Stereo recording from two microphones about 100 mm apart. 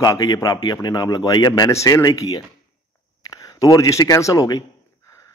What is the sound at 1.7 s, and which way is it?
Speech, 30° left (ahead or behind).